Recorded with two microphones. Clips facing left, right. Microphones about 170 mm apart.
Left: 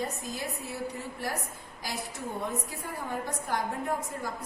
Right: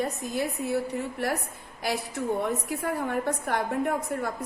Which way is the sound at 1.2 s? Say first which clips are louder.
Right 6 dB; 65° right (ahead or behind).